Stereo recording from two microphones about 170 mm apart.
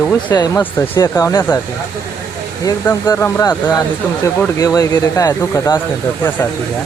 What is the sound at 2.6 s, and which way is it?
Speech, 20° left (ahead or behind).